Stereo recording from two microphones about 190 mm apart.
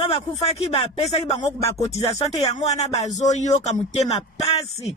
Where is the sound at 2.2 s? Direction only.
30° left (ahead or behind).